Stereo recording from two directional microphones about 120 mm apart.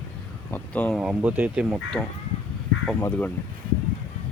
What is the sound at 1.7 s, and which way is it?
Speech, centre (ahead or behind).